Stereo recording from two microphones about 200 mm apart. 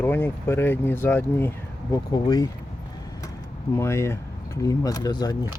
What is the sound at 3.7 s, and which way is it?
Speech, 15° left (ahead or behind).